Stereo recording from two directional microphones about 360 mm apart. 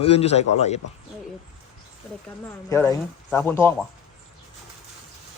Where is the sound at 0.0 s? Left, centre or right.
Centre.